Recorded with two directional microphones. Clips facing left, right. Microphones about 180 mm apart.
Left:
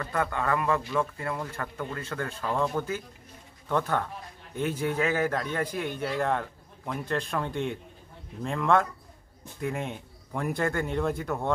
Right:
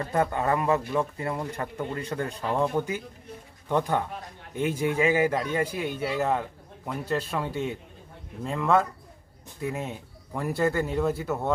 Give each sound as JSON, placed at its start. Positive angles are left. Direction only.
{"t": 0.0, "sound": "a man's voice", "side_deg": -25}